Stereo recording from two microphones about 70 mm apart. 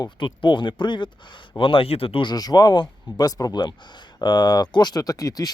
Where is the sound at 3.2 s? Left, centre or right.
Left.